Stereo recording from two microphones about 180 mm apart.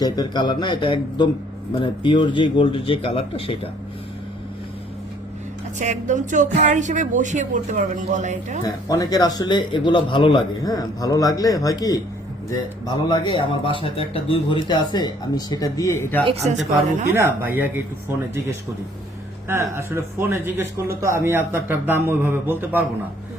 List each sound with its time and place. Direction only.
0.0 s speech: 25° left (ahead or behind)
5.8 s speech: 40° right (ahead or behind)
8.6 s speech: 20° left (ahead or behind)
16.2 s a woman's voice: 35° right (ahead or behind)
17.1 s speech: 10° right (ahead or behind)
19.5 s speech: 10° right (ahead or behind)